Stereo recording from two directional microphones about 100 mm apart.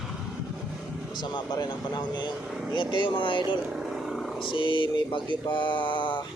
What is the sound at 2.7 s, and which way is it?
Mantra, 55° left (ahead or behind).